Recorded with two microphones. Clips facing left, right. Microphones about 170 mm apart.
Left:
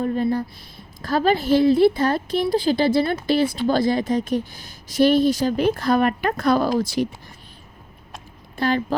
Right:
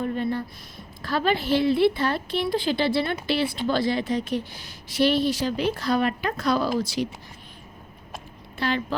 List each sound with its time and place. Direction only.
0.0 s a woman's voice: 40° left (ahead or behind)
8.5 s speech: 45° left (ahead or behind)